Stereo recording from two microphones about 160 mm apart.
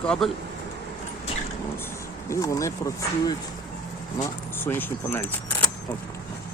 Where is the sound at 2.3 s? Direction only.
20° left (ahead or behind).